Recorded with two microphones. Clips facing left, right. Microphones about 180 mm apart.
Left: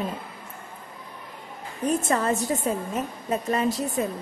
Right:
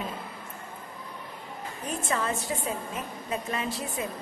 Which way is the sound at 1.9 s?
40° left (ahead or behind).